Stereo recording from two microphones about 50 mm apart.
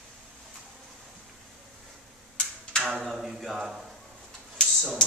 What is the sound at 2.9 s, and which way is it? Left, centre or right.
Speech, centre.